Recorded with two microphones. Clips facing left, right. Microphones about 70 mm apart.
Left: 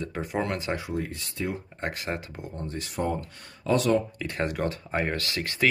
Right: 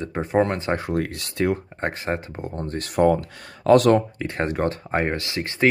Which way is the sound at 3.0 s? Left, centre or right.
Right.